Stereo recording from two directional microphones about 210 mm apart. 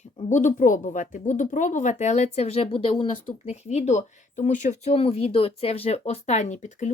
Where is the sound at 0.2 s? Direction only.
35° left (ahead or behind).